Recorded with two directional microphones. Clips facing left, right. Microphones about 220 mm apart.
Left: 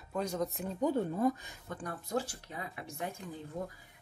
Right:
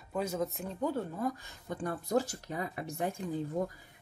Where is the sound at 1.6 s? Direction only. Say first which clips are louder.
Right 5 dB; 25° right (ahead or behind).